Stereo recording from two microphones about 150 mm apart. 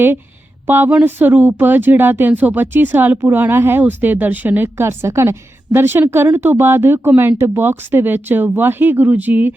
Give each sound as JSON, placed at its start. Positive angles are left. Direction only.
{"t": 0.7, "sound": "speech", "side_deg": -10}